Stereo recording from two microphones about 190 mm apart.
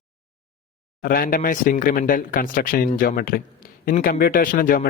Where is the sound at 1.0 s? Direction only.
50° left (ahead or behind).